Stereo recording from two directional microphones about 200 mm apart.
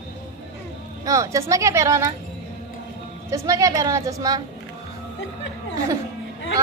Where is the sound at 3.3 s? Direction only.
15° right (ahead or behind).